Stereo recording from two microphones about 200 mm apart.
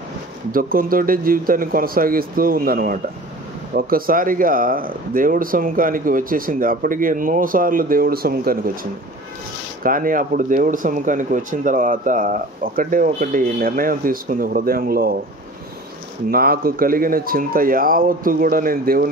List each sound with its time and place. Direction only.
0.5 s speech: 45° right (ahead or behind)
9.8 s speech: 45° right (ahead or behind)
16.3 s speech: 50° right (ahead or behind)